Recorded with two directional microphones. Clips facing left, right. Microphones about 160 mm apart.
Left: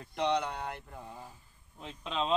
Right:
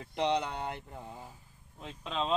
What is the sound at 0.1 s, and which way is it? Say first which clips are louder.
Speech: even; 25° right (ahead or behind).